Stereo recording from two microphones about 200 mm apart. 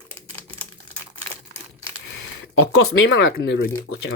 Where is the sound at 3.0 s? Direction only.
70° left (ahead or behind).